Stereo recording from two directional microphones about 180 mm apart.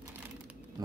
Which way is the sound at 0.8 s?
20° right (ahead or behind).